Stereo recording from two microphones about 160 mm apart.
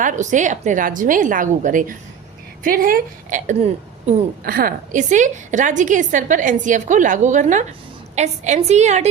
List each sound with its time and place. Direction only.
0.0 s a woman's voice: 50° right (ahead or behind)
4.4 s a woman's voice: 65° right (ahead or behind); by 9.0 s 45° right (ahead or behind)